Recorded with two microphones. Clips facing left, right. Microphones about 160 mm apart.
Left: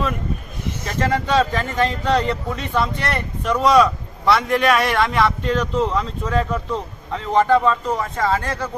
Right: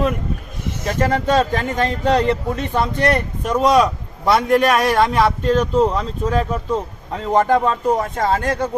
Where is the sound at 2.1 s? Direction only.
50° right (ahead or behind).